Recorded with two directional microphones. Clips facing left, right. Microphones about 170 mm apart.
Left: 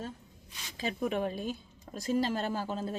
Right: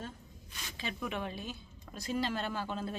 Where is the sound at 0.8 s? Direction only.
40° left (ahead or behind).